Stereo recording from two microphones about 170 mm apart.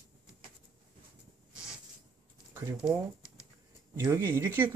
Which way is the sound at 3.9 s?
15° right (ahead or behind).